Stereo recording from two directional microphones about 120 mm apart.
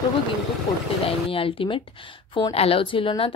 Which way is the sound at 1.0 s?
50° left (ahead or behind).